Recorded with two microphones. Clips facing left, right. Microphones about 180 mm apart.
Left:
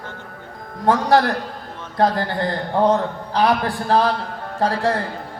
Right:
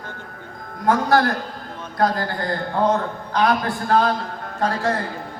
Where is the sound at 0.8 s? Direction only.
30° left (ahead or behind).